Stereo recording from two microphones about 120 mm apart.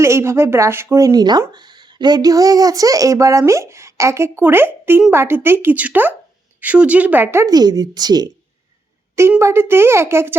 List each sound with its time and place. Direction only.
0.0 s a woman's voice: 25° right (ahead or behind)
9.4 s speech: 20° right (ahead or behind)